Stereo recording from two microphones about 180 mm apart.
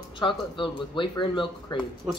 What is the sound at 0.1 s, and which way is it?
Speech, 30° left (ahead or behind).